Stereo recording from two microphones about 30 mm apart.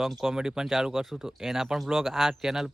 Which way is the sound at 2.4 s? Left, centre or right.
Centre.